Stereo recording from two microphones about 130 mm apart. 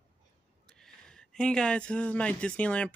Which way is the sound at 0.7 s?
5° left (ahead or behind).